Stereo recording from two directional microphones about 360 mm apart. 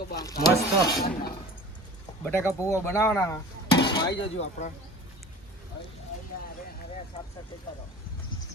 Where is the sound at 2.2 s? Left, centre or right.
Centre.